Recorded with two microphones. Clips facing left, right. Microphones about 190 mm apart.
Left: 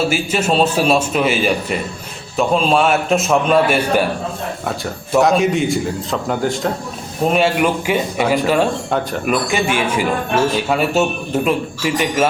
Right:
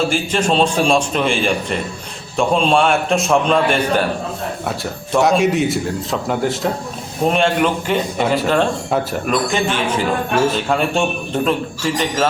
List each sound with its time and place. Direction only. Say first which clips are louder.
0.1 s a man's voice: even; 5° left (ahead or behind)
5.1 s a man's voice: left 1 dB; centre (ahead or behind)